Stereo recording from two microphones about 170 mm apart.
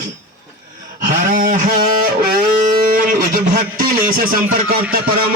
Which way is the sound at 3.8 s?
60° right (ahead or behind).